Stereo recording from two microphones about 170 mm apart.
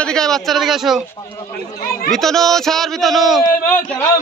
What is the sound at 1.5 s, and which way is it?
Speech, 60° left (ahead or behind).